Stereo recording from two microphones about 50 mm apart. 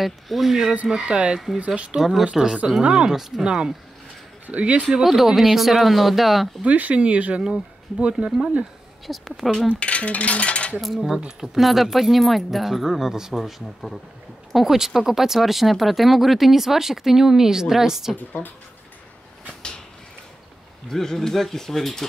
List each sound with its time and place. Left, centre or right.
0.0 s speech: centre
1.0 s speech: centre
2.0 s speech: centre
3.1 s speech: centre
4.5 s speech: right
5.0 s speech: centre
6.6 s speech: right
9.0 s speech: centre
9.8 s a sound: left
10.8 s speech: centre
11.1 s speech: centre
11.5 s speech: centre
18.1 s a woman's voice: left
20.9 s speech: centre